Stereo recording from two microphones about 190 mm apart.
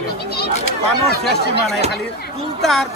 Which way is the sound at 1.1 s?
60° left (ahead or behind).